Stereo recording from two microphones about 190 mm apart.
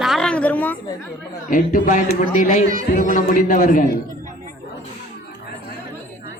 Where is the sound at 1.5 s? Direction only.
45° left (ahead or behind).